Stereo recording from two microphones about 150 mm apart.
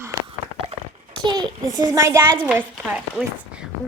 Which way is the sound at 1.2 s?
25° right (ahead or behind).